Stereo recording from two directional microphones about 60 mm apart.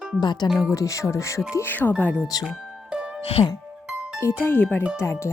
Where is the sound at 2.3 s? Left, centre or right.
Left.